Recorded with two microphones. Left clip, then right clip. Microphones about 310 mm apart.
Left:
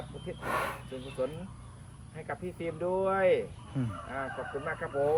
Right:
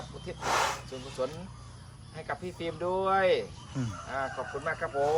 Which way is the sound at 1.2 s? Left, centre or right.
Centre.